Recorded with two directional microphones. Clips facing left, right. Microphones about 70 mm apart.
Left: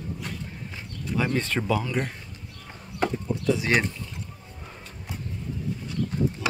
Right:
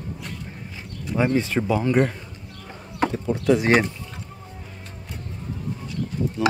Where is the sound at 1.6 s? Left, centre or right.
Right.